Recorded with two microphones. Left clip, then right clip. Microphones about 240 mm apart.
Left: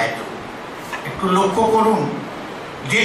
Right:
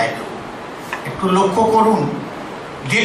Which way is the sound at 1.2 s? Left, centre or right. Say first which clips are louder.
Right 2 dB; centre.